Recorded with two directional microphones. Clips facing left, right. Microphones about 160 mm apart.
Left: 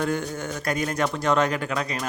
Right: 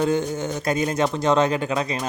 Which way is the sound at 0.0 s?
20° right (ahead or behind).